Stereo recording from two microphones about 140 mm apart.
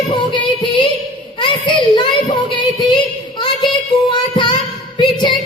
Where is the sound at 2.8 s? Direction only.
35° left (ahead or behind).